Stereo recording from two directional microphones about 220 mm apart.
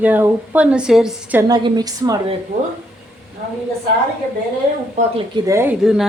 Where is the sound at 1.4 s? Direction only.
20° right (ahead or behind).